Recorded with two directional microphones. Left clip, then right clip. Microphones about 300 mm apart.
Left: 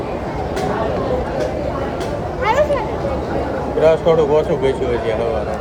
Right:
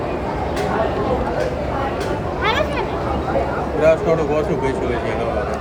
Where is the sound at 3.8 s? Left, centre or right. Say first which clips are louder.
Left 3 dB; centre.